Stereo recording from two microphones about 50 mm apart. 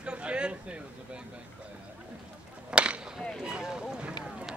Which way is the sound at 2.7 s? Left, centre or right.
Right.